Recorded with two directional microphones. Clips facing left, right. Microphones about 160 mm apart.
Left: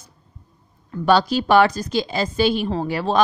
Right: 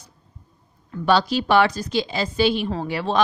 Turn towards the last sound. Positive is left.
turn(degrees=45)  # may be behind; listen again after turning